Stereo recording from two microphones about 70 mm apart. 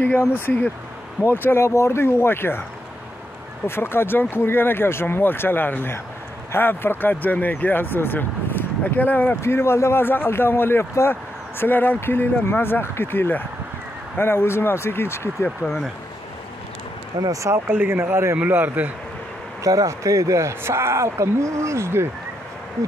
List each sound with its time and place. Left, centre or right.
0.3 s speech: left
3.6 s speech: left
9.4 s speech: left
15.6 s speech: centre
17.1 s speech: right
17.6 s speech: right
18.4 s a man's voice: right
19.6 s speech: right